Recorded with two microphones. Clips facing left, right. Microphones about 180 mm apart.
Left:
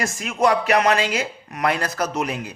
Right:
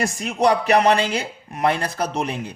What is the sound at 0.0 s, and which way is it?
A man's voice, 35° right (ahead or behind).